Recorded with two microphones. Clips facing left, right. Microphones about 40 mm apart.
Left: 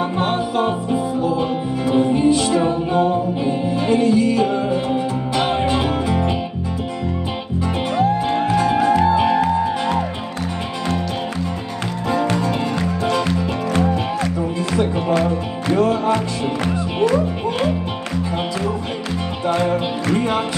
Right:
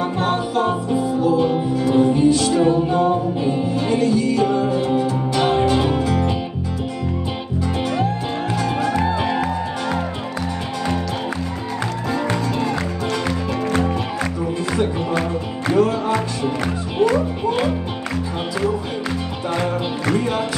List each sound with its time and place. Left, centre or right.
0.2 s music: left
1.9 s music: left
4.0 s music: left
5.3 s music: centre